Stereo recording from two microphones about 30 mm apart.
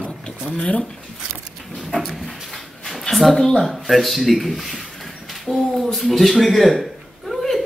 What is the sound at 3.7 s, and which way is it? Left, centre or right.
Speech, centre.